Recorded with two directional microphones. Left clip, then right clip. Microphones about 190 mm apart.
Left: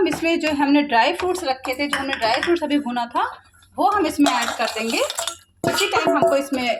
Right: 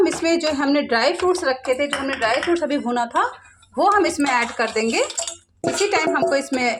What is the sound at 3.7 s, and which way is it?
Speech, 30° right (ahead or behind).